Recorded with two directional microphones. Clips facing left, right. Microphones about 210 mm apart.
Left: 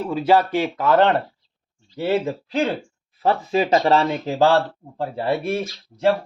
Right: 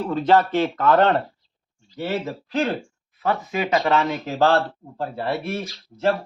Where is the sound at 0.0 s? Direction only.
10° left (ahead or behind).